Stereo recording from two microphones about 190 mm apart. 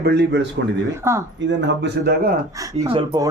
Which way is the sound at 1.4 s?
60° right (ahead or behind).